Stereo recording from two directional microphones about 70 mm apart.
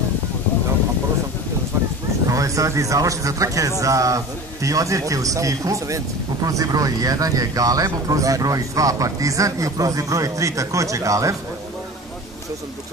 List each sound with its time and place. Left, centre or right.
2.2 s a man's voice: right